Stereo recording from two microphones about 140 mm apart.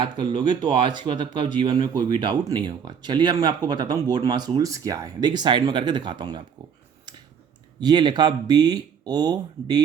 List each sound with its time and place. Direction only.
0.0 s speech: 35° right (ahead or behind)
7.8 s speech: 30° right (ahead or behind)